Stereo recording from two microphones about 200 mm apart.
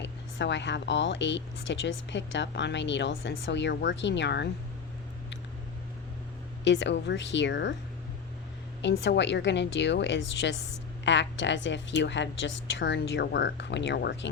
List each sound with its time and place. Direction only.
0.0 s a woman's voice: 60° left (ahead or behind)
6.7 s a woman's voice: 65° left (ahead or behind)
8.8 s a woman's voice: 60° left (ahead or behind)